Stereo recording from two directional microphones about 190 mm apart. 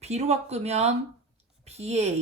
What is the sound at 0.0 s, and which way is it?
A woman's voice, 35° right (ahead or behind).